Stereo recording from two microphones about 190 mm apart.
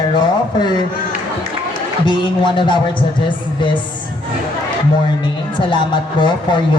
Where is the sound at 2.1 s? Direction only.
25° left (ahead or behind).